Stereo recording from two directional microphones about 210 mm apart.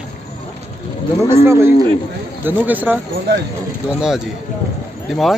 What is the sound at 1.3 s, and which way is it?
Speech, 10° right (ahead or behind).